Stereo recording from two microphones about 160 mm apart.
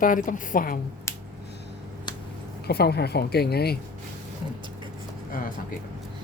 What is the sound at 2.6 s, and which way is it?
Speech, 90° left.